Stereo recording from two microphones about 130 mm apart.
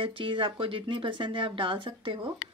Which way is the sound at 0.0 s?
40° right (ahead or behind).